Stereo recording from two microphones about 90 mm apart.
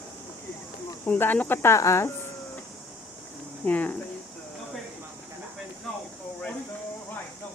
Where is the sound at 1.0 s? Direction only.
20° left (ahead or behind).